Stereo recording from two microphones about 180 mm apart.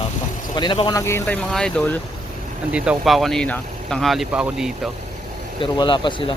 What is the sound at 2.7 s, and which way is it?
Speech, 5° right (ahead or behind).